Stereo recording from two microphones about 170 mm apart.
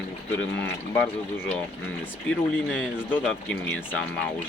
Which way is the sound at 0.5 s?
90° left.